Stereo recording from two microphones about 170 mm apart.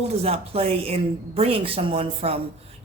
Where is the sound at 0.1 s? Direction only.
35° right (ahead or behind).